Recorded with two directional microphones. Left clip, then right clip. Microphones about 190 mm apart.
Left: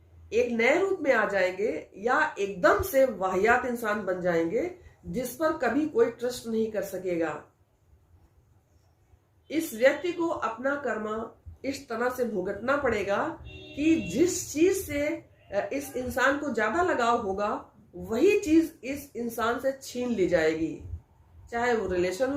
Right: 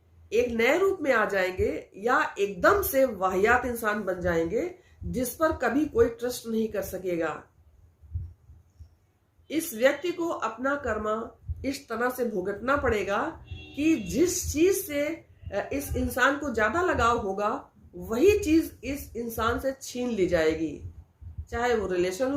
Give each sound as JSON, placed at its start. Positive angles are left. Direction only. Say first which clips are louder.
{"t": 0.3, "sound": "a woman's voice", "louder": "even", "side_deg": -40}
{"t": 9.7, "sound": "a woman's voice", "louder": "left 1 dB", "side_deg": -40}